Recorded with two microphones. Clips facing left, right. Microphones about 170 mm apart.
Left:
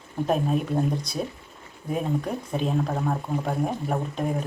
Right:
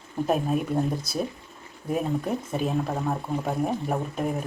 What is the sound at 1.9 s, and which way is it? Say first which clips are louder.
Speech: right 1 dB; 5° right (ahead or behind).